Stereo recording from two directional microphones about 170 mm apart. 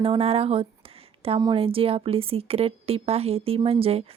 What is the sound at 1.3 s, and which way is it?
Speech, 20° right (ahead or behind).